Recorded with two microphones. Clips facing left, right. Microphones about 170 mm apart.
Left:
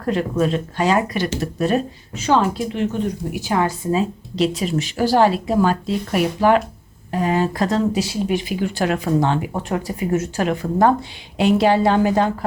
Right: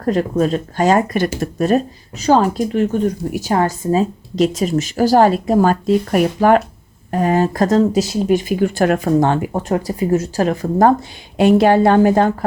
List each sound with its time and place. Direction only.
0.0 s speech: 40° right (ahead or behind)
9.5 s speech: 35° right (ahead or behind)